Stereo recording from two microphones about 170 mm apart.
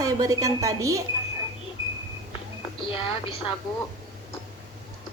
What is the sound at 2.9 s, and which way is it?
Speech, 30° left (ahead or behind).